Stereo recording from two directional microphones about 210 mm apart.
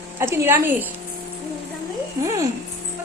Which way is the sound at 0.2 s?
10° right (ahead or behind).